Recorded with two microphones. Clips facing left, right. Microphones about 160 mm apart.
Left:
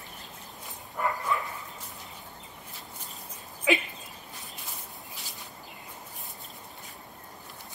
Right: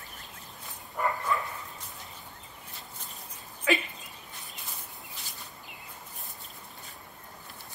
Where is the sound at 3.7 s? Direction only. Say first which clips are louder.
Left 1 dB; 15° left (ahead or behind).